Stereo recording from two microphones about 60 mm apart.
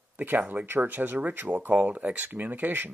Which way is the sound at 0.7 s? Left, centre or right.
Right.